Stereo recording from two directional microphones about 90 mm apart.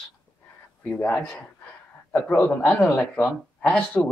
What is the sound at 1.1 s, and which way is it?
Speech, 5° left (ahead or behind).